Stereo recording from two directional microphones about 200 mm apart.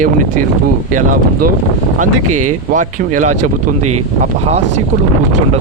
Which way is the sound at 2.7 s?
40° right (ahead or behind).